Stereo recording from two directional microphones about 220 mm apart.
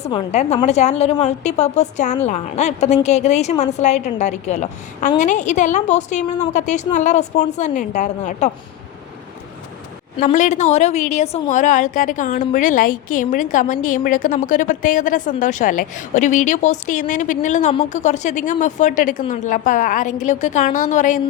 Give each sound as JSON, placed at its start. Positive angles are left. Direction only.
{"t": 0.0, "sound": "a woman's voice", "side_deg": 25}
{"t": 10.2, "sound": "a woman's voice", "side_deg": 35}